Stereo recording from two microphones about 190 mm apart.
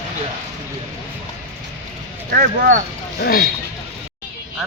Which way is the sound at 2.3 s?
50° right (ahead or behind).